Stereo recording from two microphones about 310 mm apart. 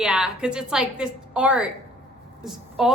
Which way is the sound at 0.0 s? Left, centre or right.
Centre.